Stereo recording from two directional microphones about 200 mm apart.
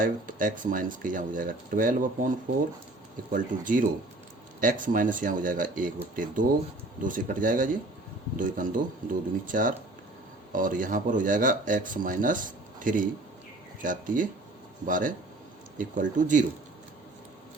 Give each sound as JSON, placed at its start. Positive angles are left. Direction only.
{"t": 0.0, "sound": "speech", "side_deg": -40}
{"t": 3.3, "sound": "speech", "side_deg": -40}